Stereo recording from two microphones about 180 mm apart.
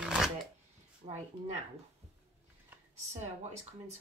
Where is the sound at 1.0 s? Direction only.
35° right (ahead or behind).